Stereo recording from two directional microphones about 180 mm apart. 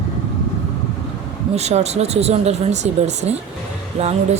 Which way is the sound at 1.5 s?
35° right (ahead or behind).